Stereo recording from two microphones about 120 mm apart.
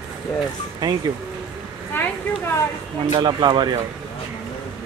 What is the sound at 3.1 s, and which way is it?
Speech, 35° right (ahead or behind).